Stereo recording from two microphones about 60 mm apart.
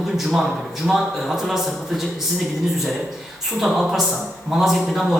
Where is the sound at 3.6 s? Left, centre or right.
Centre.